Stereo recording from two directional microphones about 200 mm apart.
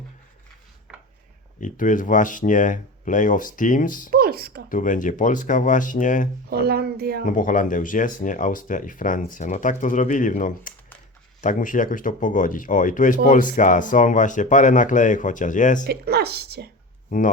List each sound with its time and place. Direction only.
1.6 s speech: 40° left (ahead or behind)
4.1 s speech: 45° right (ahead or behind)
4.7 s speech: 40° left (ahead or behind)
6.5 s a woman's voice: 50° right (ahead or behind)
7.3 s speech: 40° left (ahead or behind)
15.9 s a woman's voice: 55° right (ahead or behind)